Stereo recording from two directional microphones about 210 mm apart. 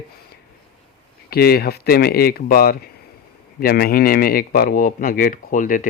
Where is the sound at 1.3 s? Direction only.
45° left (ahead or behind).